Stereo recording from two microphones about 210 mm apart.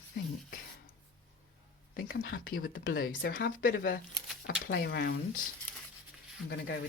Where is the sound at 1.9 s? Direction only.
45° left (ahead or behind).